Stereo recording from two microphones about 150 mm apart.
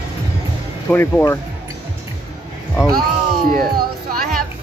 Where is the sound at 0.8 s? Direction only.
15° left (ahead or behind).